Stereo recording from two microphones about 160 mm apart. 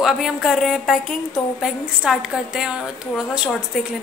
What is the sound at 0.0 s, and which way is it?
A woman's voice, centre (ahead or behind).